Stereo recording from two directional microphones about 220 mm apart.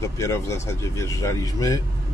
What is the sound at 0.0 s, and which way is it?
Speech, 15° left (ahead or behind).